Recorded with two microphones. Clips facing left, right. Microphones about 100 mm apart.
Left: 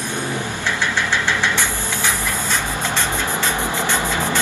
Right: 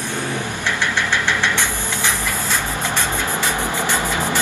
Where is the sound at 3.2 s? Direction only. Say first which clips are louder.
Even; 15° right (ahead or behind).